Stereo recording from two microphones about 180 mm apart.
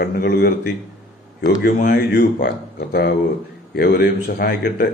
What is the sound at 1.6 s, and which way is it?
A man's voice, 55° left (ahead or behind).